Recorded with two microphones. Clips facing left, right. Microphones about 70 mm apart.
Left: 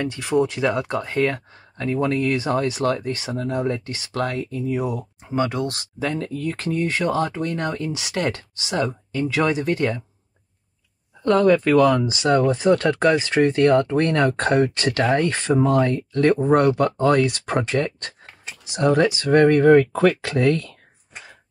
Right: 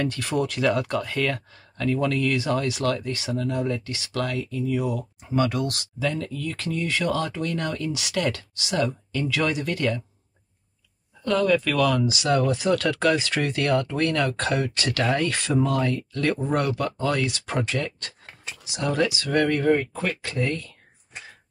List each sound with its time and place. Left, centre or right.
0.0 s speech: centre
11.2 s speech: left
16.4 s speech: left
19.7 s speech: left